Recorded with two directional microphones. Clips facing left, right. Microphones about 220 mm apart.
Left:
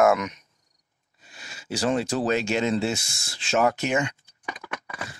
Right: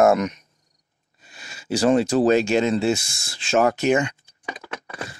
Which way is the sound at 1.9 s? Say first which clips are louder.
Right 8 dB; 35° right (ahead or behind).